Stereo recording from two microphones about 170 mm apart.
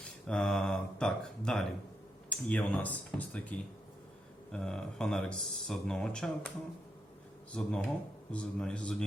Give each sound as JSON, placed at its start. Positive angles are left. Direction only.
{"t": 0.3, "sound": "speech", "side_deg": 5}
{"t": 4.5, "sound": "speech", "side_deg": 5}
{"t": 7.5, "sound": "speech", "side_deg": 5}